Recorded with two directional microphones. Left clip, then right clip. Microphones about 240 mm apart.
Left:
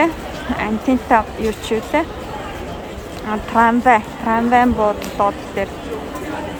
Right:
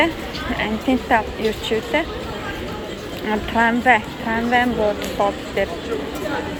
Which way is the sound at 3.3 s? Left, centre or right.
Centre.